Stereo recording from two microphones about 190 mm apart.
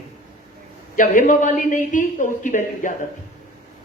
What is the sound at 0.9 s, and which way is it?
A woman's voice, 45° left (ahead or behind).